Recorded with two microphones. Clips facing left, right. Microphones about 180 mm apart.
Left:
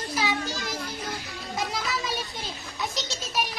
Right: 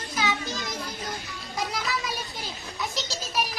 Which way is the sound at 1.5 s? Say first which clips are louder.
Even; centre (ahead or behind).